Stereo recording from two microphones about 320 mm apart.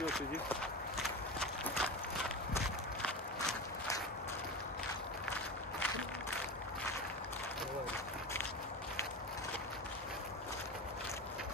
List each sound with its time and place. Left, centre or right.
0.0 s run: centre